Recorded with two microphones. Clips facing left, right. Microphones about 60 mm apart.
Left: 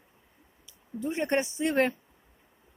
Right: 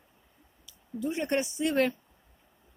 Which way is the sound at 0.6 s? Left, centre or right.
Left.